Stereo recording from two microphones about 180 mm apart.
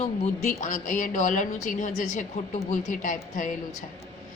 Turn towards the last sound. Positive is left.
turn(degrees=45)  # may be behind; listen again after turning